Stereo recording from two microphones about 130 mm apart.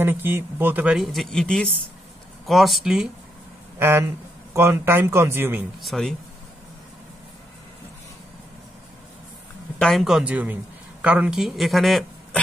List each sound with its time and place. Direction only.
0.0 s speech: 15° right (ahead or behind)
0.9 s a man's voice: centre (ahead or behind)
3.8 s speech: 20° right (ahead or behind)
5.8 s a man's voice: centre (ahead or behind)
9.8 s speech: centre (ahead or behind)